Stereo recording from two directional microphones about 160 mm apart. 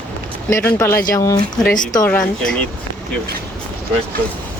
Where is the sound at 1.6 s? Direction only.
55° left (ahead or behind).